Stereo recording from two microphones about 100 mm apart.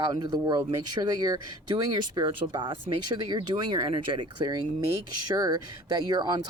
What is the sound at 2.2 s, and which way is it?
Speech, 55° right (ahead or behind).